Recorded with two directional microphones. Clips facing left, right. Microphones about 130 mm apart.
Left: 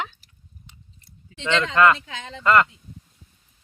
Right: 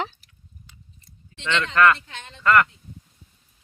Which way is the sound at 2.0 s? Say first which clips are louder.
Left 5 dB; 90° left.